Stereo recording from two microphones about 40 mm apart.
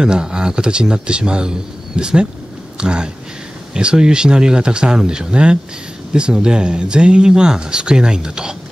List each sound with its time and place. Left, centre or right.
0.0 s speech: right